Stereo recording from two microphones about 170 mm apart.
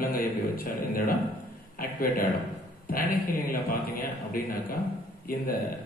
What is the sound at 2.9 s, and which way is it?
A man's voice, 60° left (ahead or behind).